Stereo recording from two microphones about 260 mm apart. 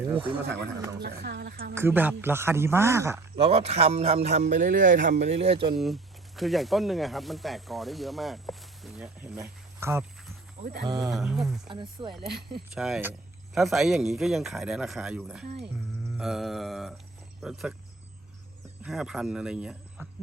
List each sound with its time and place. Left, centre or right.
0.8 s a man's voice: centre
1.0 s a woman's voice: right
1.7 s a man's voice: centre
3.4 s speech: right
5.7 s speech: centre
10.6 s speech: right
10.8 s a man's voice: centre
11.1 s speech: centre
11.7 s speech: centre
12.7 s speech: centre
18.8 s speech: centre